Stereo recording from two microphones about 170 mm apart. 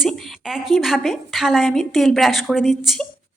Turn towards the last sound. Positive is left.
turn(degrees=0)  # may be behind; listen again after turning